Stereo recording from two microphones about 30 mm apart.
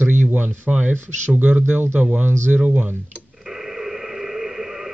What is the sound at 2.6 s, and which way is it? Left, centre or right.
Speech, right.